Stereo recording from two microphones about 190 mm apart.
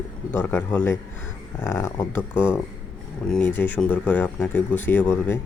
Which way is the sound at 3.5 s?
10° left (ahead or behind).